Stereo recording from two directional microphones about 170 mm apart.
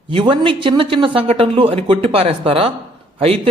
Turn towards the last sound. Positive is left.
turn(degrees=-35)  # may be behind; listen again after turning